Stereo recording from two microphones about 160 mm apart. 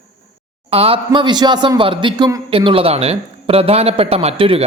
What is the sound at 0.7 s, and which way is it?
A man's voice, 35° right (ahead or behind).